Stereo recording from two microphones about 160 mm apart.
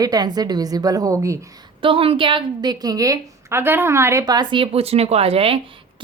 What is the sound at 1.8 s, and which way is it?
A woman's voice, 35° right (ahead or behind).